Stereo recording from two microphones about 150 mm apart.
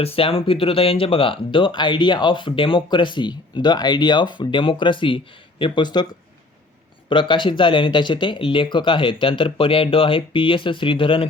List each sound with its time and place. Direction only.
0.0 s speech: 40° left (ahead or behind)
7.1 s speech: 35° left (ahead or behind)